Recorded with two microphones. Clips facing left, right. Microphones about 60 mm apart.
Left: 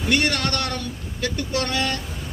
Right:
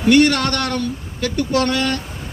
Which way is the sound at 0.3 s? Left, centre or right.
Right.